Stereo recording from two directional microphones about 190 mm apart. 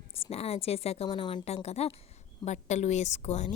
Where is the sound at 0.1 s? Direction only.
30° left (ahead or behind).